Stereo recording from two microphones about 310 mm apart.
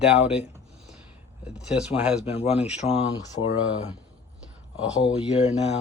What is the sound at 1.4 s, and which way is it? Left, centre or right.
Speech, centre.